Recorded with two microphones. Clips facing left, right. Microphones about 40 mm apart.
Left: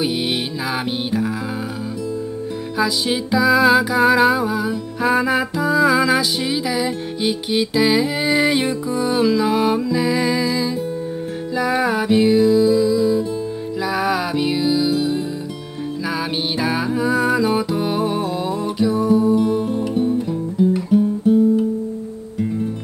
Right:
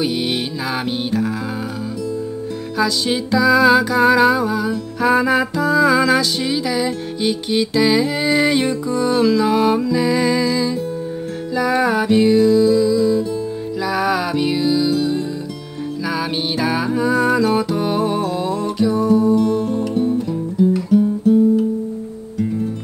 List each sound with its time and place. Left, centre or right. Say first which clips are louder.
2.8 s music: right 1 dB; centre
16.5 s music: right 2 dB; centre
20.7 s guitar: right 1 dB; centre